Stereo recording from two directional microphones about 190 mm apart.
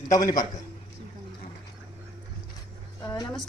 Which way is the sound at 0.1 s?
20° left (ahead or behind).